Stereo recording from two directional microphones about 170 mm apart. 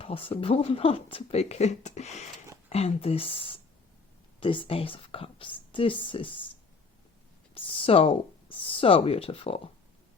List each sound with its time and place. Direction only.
0.0 s speech: 30° left (ahead or behind)
7.5 s speech: 30° left (ahead or behind)